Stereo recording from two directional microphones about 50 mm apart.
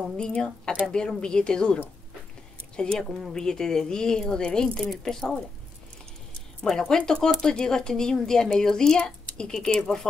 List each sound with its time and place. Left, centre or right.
0.2 s speech: centre
6.6 s speech: centre